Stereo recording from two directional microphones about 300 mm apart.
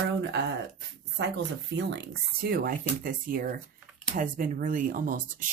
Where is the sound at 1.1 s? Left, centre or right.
Right.